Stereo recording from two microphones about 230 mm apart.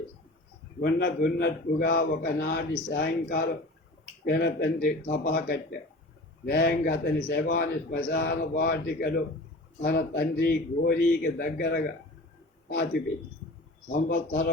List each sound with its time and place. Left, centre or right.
0.8 s a man's voice: left
13.9 s a man's voice: left